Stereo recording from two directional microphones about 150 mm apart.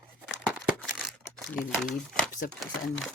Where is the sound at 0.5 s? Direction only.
5° right (ahead or behind).